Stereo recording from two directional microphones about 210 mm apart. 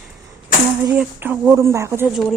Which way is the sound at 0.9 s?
10° right (ahead or behind).